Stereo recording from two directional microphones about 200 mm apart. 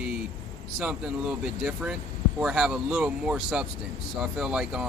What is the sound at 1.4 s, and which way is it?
Speech, 5° right (ahead or behind).